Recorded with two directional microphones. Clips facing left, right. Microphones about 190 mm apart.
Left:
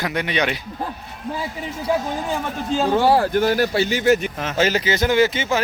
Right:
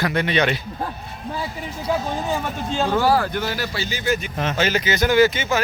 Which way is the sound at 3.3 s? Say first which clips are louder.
Left 8 dB; 50° left (ahead or behind).